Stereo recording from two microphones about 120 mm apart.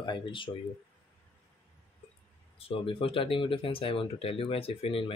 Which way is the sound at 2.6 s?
50° left (ahead or behind).